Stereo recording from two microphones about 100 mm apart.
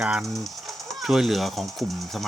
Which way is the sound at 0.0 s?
10° right (ahead or behind).